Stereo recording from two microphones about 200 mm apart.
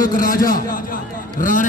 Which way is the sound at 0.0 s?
45° left (ahead or behind).